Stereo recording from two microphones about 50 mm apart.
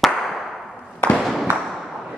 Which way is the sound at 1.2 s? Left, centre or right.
Centre.